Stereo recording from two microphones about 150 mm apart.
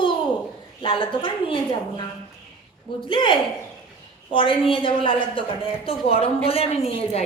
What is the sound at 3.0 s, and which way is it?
A woman's voice, 35° left (ahead or behind).